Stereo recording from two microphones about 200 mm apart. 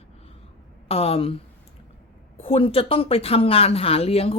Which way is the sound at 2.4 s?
30° left (ahead or behind).